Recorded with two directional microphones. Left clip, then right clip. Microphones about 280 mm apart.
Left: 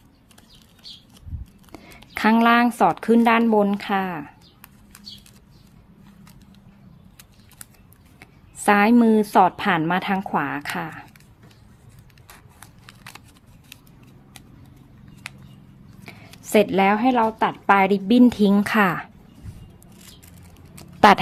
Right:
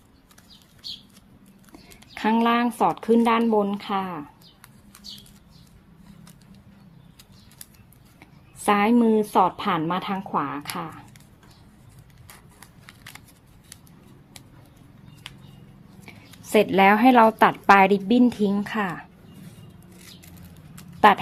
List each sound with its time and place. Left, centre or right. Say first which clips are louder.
1.7 s speech: left 7 dB; centre
8.2 s speech: left 4 dB; centre
12.8 s shuffling cards: left 2 dB; centre
16.0 s a woman's voice: left 3 dB; centre
18.1 s speech: left 4 dB; centre